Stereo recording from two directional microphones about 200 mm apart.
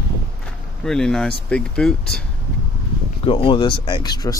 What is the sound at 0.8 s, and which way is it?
Speech, 5° left (ahead or behind).